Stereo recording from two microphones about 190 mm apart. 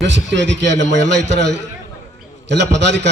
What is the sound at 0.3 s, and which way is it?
A man's voice, 70° right (ahead or behind).